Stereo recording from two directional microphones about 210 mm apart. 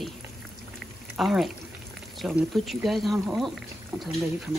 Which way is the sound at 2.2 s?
Centre (ahead or behind).